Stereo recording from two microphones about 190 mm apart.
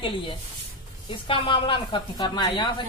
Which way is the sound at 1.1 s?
25° left (ahead or behind).